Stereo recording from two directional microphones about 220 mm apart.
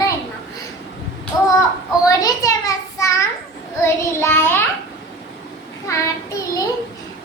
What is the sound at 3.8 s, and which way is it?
Child singing, 10° left (ahead or behind).